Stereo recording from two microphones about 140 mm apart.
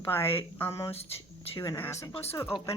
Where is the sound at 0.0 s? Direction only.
15° left (ahead or behind).